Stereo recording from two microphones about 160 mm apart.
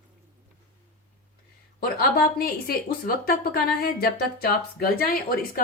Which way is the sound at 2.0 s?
70° left (ahead or behind).